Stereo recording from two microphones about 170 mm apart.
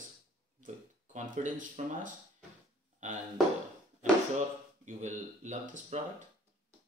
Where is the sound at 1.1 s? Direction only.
50° right (ahead or behind).